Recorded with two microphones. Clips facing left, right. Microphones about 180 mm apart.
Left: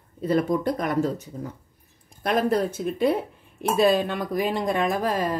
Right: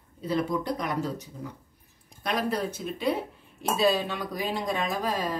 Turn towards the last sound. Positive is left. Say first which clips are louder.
# left 5 dB
turn(degrees=55)  # may be behind; listen again after turning